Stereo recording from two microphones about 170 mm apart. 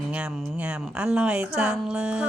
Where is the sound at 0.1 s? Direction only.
5° right (ahead or behind).